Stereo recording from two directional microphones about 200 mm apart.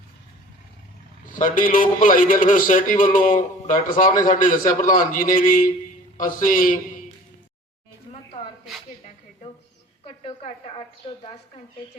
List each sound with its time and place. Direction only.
1.3 s a man's voice: 40° left (ahead or behind)
10.2 s a woman's voice: 30° left (ahead or behind)